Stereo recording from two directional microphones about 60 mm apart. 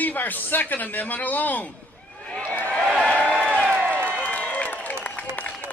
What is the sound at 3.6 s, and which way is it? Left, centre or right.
Applause, right.